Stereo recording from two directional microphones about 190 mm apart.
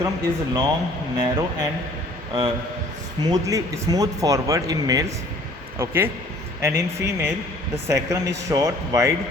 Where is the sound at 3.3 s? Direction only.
20° right (ahead or behind).